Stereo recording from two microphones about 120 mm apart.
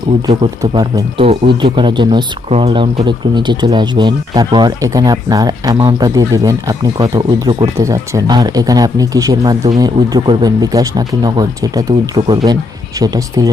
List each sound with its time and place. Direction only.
1.2 s speech: 50° right (ahead or behind)
2.5 s speech: 60° right (ahead or behind)
3.0 s speech: 40° right (ahead or behind)